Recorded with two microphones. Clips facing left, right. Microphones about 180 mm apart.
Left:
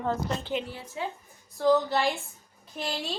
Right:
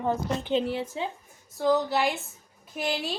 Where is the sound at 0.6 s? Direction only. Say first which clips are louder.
Right 11 dB; 70° right (ahead or behind).